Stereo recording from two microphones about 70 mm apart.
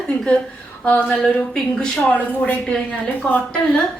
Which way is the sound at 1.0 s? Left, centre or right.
Centre.